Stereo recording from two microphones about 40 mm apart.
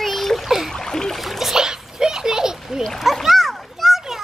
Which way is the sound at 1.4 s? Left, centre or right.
Centre.